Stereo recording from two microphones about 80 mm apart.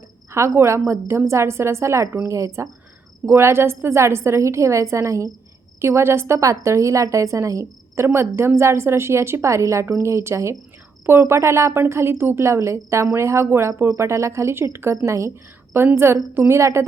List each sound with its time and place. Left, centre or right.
0.3 s a woman's voice: right